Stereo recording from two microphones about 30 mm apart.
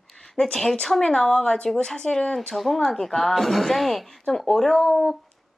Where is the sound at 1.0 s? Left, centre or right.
Left.